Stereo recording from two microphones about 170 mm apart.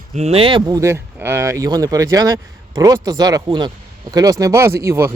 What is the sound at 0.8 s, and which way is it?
Speech, 15° right (ahead or behind).